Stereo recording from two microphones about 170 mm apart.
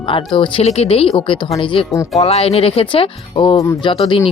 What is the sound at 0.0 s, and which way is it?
Speech, 30° left (ahead or behind).